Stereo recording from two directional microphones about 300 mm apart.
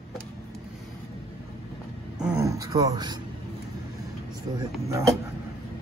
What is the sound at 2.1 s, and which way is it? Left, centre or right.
Speech, centre.